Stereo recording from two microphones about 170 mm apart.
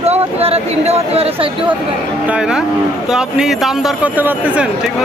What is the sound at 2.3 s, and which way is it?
Speech, 5° right (ahead or behind).